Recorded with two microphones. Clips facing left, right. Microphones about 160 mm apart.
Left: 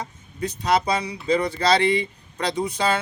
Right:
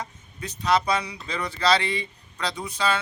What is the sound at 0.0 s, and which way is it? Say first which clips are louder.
Speech: left 6 dB; 35° left (ahead or behind).